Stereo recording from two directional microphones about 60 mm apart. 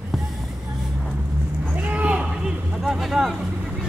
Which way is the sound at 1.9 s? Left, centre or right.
Right.